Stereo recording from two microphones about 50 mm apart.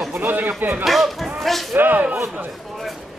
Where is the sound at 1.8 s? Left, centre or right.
Right.